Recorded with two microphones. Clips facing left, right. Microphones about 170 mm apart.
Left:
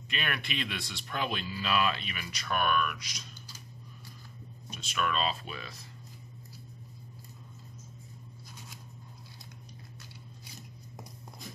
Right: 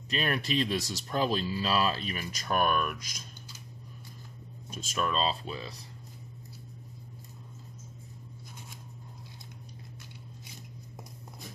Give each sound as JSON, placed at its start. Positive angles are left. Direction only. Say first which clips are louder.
{"t": 0.1, "sound": "speech", "louder": "right 6 dB", "side_deg": -35}
{"t": 4.9, "sound": "speech", "louder": "right 1 dB", "side_deg": -30}